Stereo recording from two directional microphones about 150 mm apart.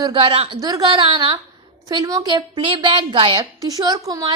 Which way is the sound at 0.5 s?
25° right (ahead or behind).